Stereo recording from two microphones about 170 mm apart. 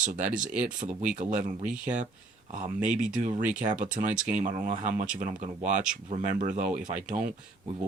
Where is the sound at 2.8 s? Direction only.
5° right (ahead or behind).